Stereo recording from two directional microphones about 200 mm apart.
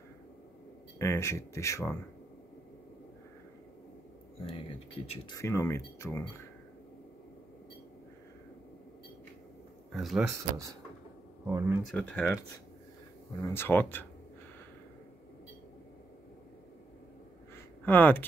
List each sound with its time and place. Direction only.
0.9 s speech: 15° left (ahead or behind)
4.4 s speech: 30° left (ahead or behind)
5.4 s speech: 15° left (ahead or behind)
9.9 s speech: centre (ahead or behind)
11.4 s speech: 10° right (ahead or behind)
11.8 s speech: 5° left (ahead or behind)
13.4 s speech: 10° left (ahead or behind)
17.8 s speech: 10° left (ahead or behind)